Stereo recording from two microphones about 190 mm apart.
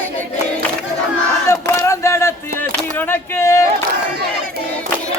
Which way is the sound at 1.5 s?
15° left (ahead or behind).